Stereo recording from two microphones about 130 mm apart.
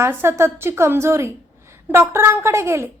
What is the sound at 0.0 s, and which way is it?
A woman's voice, 20° right (ahead or behind).